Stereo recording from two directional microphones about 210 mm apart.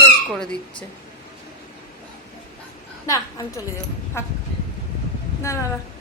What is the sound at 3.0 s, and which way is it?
Speech, 15° left (ahead or behind).